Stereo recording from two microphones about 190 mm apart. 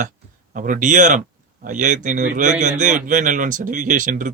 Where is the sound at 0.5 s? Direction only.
45° right (ahead or behind).